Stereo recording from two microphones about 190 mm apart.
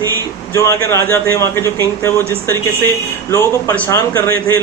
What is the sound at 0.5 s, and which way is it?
A man's voice, 15° left (ahead or behind).